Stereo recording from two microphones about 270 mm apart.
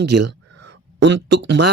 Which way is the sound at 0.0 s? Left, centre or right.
Right.